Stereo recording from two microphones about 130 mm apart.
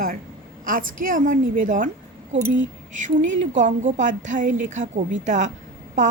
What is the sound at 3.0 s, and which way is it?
A woman's voice, 75° right (ahead or behind).